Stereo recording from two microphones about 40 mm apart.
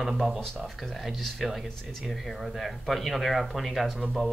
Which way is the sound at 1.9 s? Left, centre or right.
Centre.